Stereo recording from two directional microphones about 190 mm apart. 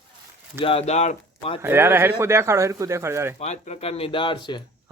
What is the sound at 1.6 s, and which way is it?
Speech, 10° right (ahead or behind).